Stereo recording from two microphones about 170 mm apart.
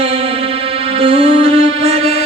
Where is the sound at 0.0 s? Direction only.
35° right (ahead or behind).